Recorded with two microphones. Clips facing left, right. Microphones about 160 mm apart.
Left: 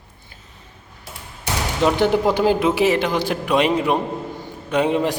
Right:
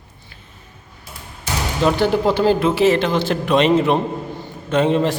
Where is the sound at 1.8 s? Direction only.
20° left (ahead or behind).